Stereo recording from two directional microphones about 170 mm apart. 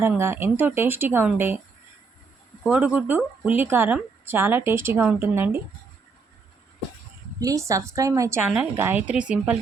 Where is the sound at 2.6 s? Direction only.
10° right (ahead or behind).